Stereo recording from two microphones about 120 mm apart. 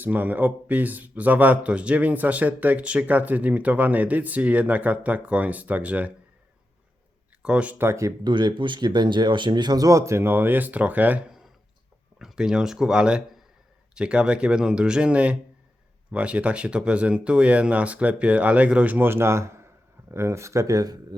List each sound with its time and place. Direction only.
0.0 s speech: 15° right (ahead or behind)
7.4 s speech: 10° right (ahead or behind); by 8.3 s 25° right (ahead or behind)
8.3 s speech: 40° right (ahead or behind)